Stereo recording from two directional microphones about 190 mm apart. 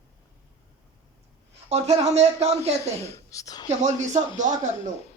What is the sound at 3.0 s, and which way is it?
Speech, 15° left (ahead or behind).